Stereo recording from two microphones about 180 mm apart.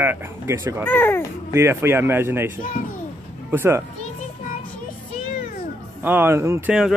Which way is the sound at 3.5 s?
15° right (ahead or behind).